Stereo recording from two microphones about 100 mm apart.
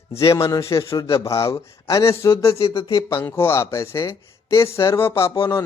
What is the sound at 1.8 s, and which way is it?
Speech, 30° left (ahead or behind).